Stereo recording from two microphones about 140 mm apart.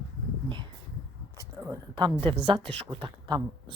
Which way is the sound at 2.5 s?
40° right (ahead or behind).